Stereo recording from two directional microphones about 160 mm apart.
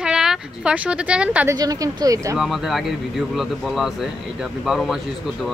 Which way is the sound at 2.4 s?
Centre (ahead or behind).